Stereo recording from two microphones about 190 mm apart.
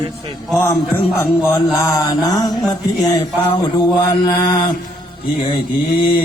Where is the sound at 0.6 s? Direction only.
15° left (ahead or behind).